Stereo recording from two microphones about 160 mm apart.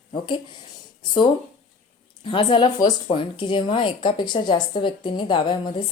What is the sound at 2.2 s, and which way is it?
Speech, 30° left (ahead or behind).